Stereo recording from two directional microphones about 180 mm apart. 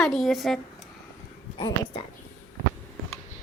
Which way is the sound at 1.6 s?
25° left (ahead or behind).